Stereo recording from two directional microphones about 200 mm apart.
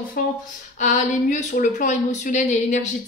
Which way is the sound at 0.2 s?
45° left (ahead or behind).